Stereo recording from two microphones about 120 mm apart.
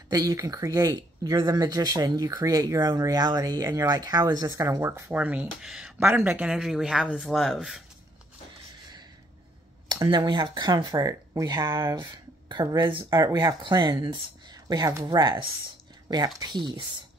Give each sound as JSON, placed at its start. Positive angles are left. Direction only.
{"t": 0.1, "sound": "speech", "side_deg": -30}
{"t": 5.1, "sound": "speech", "side_deg": -10}
{"t": 9.8, "sound": "speech", "side_deg": -40}
{"t": 12.4, "sound": "speech", "side_deg": -40}